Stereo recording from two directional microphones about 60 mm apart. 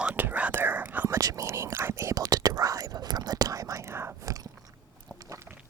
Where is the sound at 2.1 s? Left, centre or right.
Right.